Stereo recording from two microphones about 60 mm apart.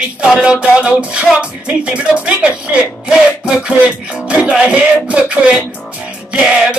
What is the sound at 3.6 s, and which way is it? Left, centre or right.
Music, right.